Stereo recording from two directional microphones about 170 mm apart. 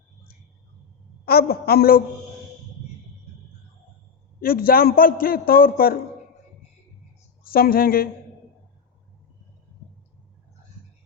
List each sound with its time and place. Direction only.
1.2 s a man's voice: 65° left (ahead or behind)
4.4 s a man's voice: 60° left (ahead or behind)
7.4 s a man's voice: 60° left (ahead or behind)